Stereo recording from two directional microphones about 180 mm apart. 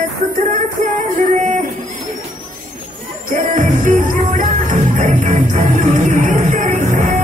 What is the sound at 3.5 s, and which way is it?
Music, 45° right (ahead or behind).